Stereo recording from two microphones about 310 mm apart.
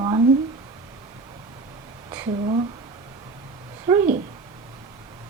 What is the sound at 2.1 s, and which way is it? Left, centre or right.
Speech, centre.